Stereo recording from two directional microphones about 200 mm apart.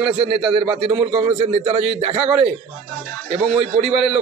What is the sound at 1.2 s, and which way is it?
A man's voice, 25° right (ahead or behind).